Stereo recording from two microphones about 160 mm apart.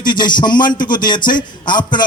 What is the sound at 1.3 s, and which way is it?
Speech, 30° left (ahead or behind).